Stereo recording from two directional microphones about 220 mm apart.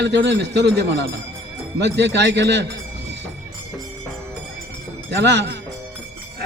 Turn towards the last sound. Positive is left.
turn(degrees=-50)  # may be behind; listen again after turning